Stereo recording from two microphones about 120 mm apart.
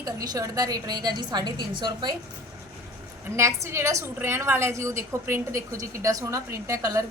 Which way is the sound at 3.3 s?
20° right (ahead or behind).